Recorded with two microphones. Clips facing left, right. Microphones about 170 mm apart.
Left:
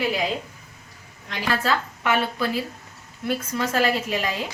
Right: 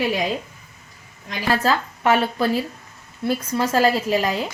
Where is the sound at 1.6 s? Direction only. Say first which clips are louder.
Right 4 dB; 40° right (ahead or behind).